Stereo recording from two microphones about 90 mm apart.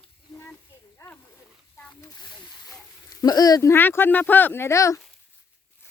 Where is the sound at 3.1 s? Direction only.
45° left (ahead or behind).